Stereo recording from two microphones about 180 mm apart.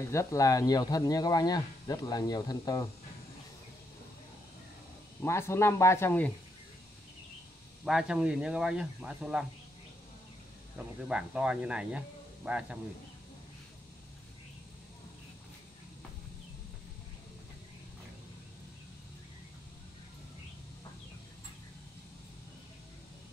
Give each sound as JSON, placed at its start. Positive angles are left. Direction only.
{"t": 0.1, "sound": "speech", "side_deg": 15}
{"t": 5.2, "sound": "speech", "side_deg": 15}
{"t": 7.8, "sound": "speech", "side_deg": -5}
{"t": 11.1, "sound": "speech", "side_deg": -5}